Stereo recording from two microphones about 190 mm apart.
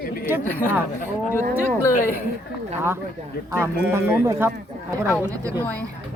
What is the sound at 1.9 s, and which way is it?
Speech, 45° left (ahead or behind).